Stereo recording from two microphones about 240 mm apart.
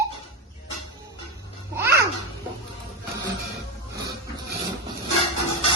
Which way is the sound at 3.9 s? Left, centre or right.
Centre.